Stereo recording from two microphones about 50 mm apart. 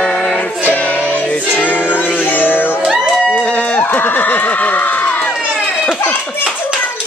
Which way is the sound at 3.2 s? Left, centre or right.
Left.